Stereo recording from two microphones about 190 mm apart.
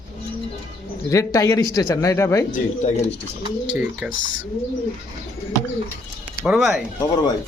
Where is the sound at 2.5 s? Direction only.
40° left (ahead or behind).